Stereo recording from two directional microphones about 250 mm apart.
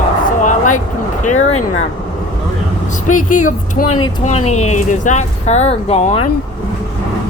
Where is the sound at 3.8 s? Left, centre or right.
Left.